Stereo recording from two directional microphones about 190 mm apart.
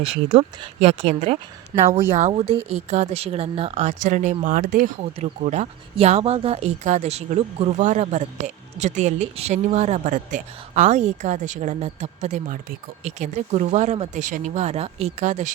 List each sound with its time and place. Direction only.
0.0 s speech: 35° right (ahead or behind)
1.7 s speech: 15° right (ahead or behind)
2.1 s speech: 35° right (ahead or behind)